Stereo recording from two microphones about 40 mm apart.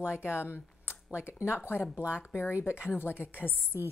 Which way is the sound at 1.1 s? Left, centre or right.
Left.